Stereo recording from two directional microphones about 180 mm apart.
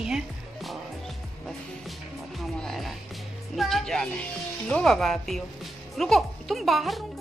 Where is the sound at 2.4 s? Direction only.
Centre (ahead or behind).